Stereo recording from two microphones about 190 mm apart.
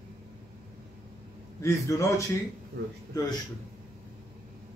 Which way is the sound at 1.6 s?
15° left (ahead or behind).